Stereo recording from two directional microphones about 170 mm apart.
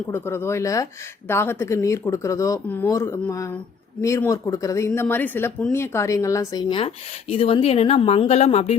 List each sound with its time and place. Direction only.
0.1 s speech: 15° left (ahead or behind); by 8.7 s 40° left (ahead or behind)